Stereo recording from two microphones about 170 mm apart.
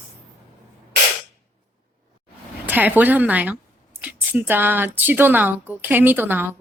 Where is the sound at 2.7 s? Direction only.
10° right (ahead or behind).